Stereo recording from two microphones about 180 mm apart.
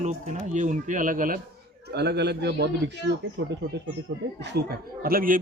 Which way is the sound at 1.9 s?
65° right (ahead or behind).